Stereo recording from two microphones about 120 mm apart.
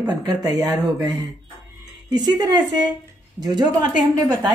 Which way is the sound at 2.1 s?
35° right (ahead or behind).